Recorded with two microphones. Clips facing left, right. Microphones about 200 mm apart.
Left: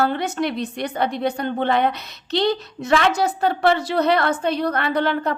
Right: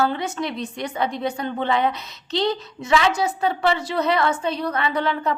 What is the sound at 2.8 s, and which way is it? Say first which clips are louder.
Speech: left 1 dB; 60° left (ahead or behind).